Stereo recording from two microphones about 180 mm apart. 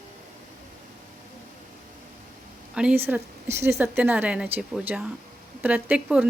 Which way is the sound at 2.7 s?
5° right (ahead or behind).